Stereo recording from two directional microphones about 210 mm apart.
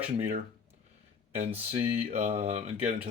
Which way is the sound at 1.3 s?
30° right (ahead or behind).